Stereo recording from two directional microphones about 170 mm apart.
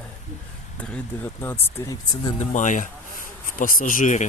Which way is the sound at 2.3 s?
45° left (ahead or behind).